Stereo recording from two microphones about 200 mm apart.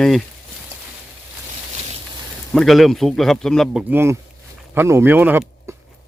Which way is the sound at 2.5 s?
Centre (ahead or behind).